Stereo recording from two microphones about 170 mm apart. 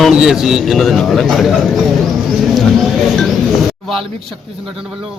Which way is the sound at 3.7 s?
Centre (ahead or behind).